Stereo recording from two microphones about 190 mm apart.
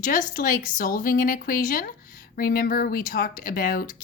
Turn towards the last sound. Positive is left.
turn(degrees=50)  # may be behind; listen again after turning